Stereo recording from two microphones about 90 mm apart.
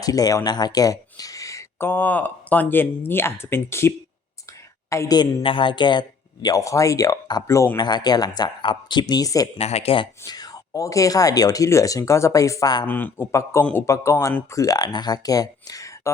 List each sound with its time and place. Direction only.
0.0 s speech: 45° left (ahead or behind)
1.8 s a man's voice: 20° left (ahead or behind)
5.1 s speech: 65° left (ahead or behind)
6.6 s speech: 35° left (ahead or behind)
7.4 s speech: 35° left (ahead or behind)
7.8 s speech: 50° left (ahead or behind)
9.8 s speech: 80° left
10.2 s a sound: 50° left (ahead or behind)
10.7 s speech: 40° left (ahead or behind)
12.9 s speech: 20° left (ahead or behind)
13.3 s speech: 35° left (ahead or behind)